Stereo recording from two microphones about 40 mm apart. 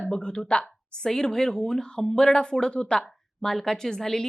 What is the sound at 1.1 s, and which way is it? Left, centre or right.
A woman's voice, centre.